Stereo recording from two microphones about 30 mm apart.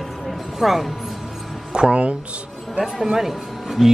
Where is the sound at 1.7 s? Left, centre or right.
Right.